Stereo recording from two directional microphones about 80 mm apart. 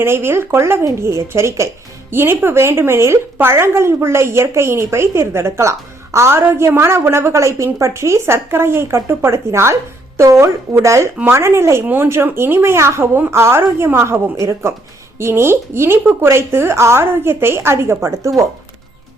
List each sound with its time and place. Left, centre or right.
0.0 s speech: right